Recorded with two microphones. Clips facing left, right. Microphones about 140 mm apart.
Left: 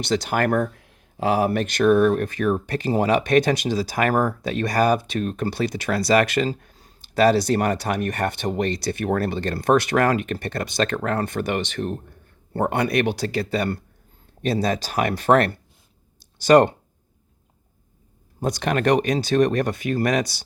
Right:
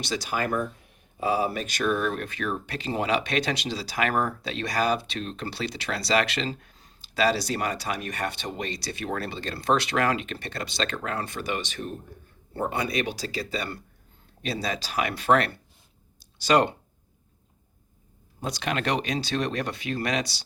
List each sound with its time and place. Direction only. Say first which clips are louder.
0.0 s speech: left 7 dB; 55° left (ahead or behind)
18.3 s speech: left 6 dB; 50° left (ahead or behind)